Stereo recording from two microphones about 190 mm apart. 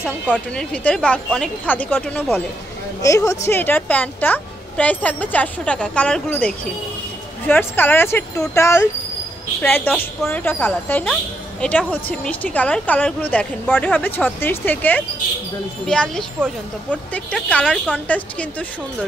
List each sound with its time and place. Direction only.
0.0 s a woman's voice: centre (ahead or behind)